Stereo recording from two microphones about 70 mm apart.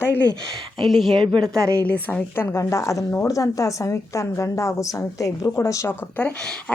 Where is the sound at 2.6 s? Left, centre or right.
Left.